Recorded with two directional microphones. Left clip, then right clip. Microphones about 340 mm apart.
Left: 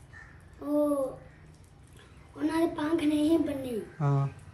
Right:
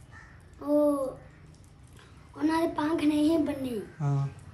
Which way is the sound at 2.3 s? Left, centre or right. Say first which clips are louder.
Right 2 dB; centre.